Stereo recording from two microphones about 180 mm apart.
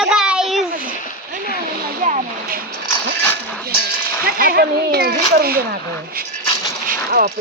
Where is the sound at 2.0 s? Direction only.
50° right (ahead or behind).